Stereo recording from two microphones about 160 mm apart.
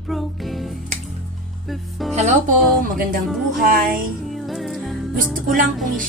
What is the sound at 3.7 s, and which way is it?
Speech, 65° right (ahead or behind).